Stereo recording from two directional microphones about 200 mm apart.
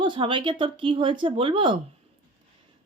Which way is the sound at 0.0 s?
25° right (ahead or behind).